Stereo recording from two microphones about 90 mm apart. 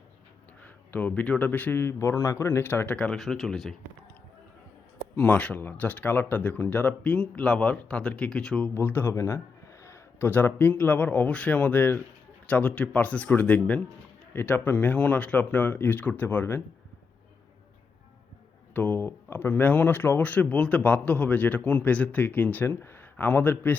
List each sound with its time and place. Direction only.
0.6 s speech: 20° left (ahead or behind)
3.1 s speech: centre (ahead or behind)
5.1 s speech: 20° left (ahead or behind)
8.7 s speech: 25° left (ahead or behind)
9.8 s a sound: 30° left (ahead or behind)
10.8 s speech: 20° left (ahead or behind)
18.7 s speech: 20° left (ahead or behind)